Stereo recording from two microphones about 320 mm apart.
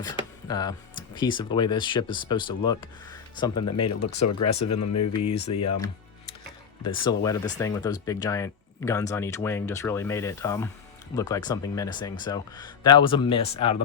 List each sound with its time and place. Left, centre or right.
0.0 s speech: centre
4.0 s speech: left
6.8 s speech: centre